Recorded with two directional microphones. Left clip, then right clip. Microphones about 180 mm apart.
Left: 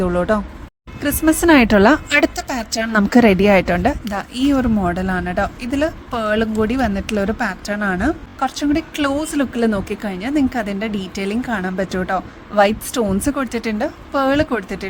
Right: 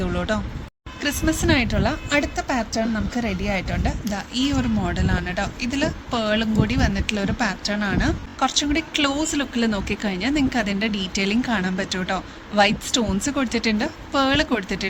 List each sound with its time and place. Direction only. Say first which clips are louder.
0.0 s speech: left 8 dB; 40° left (ahead or behind)
1.0 s a woman's voice: left 7 dB; 55° left (ahead or behind)
2.7 s speech: left 9 dB; 85° left; by 14.8 s 40° left (ahead or behind)